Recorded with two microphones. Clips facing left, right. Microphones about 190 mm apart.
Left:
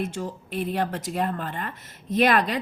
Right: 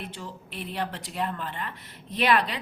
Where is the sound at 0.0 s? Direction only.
45° left (ahead or behind).